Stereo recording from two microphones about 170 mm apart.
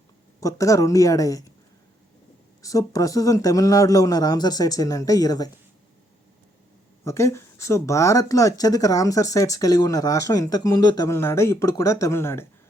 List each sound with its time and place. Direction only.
0.3 s speech: 20° left (ahead or behind)
2.6 s speech: 20° left (ahead or behind)
7.0 s speech: 15° left (ahead or behind)